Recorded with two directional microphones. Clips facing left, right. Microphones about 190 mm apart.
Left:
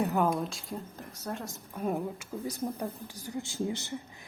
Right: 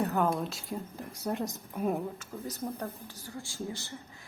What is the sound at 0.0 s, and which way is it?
Speech, 10° left (ahead or behind).